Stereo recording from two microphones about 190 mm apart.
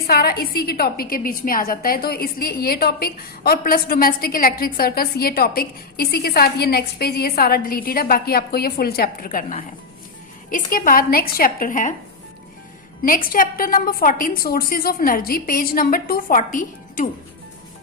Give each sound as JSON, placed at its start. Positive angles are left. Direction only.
{"t": 0.1, "sound": "a woman's voice", "side_deg": 55}
{"t": 13.0, "sound": "a woman's voice", "side_deg": 50}